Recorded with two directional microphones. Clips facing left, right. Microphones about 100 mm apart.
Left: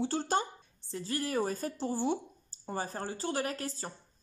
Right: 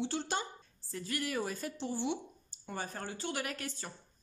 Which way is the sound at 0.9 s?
30° left (ahead or behind).